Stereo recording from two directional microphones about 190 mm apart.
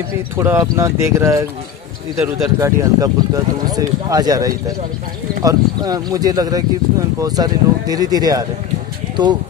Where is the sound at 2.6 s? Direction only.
15° right (ahead or behind).